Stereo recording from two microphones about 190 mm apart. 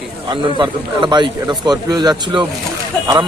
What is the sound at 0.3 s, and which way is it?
A man's voice, 25° right (ahead or behind).